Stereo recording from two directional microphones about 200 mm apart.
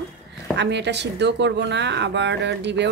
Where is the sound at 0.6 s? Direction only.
60° right (ahead or behind).